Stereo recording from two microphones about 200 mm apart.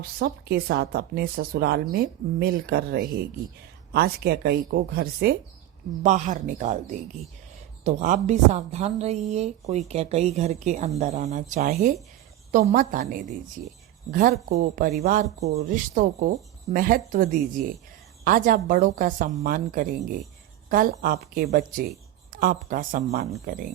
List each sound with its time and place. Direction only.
0.2 s a woman's voice: 55° right (ahead or behind)
6.0 s a woman's voice: 35° right (ahead or behind)
7.9 s a woman's voice: 35° right (ahead or behind)